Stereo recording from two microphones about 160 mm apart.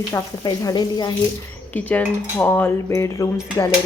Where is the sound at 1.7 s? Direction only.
10° left (ahead or behind).